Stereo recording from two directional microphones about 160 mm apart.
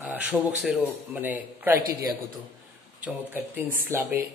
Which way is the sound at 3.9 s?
15° right (ahead or behind).